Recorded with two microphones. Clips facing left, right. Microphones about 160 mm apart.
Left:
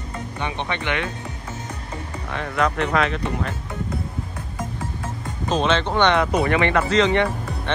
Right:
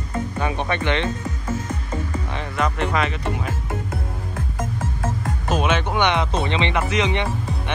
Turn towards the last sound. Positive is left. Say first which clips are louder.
# left 1 dB
turn(degrees=-15)  # may be behind; listen again after turning